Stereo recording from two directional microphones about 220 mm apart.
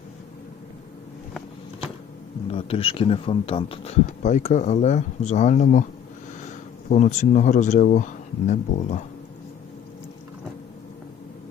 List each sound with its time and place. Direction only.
2.5 s speech: 25° left (ahead or behind)
6.9 s speech: 35° left (ahead or behind)